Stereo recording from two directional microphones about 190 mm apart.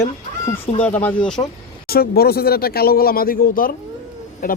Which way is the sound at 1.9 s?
55° left (ahead or behind).